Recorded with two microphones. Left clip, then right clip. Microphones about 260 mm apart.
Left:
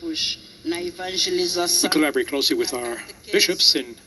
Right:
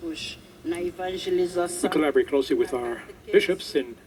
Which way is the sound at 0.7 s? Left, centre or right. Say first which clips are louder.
Left 3 dB; left.